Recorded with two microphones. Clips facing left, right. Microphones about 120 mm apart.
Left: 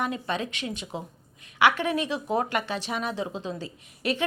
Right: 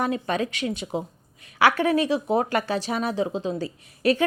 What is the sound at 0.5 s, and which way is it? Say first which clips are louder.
A woman's voice: right 6 dB; 35° right (ahead or behind).